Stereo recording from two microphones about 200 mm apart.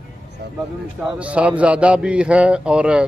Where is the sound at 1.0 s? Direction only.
5° right (ahead or behind).